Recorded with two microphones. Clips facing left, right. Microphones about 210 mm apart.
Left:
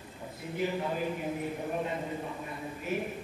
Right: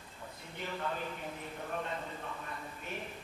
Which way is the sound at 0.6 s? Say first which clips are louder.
Left 7 dB; 10° left (ahead or behind).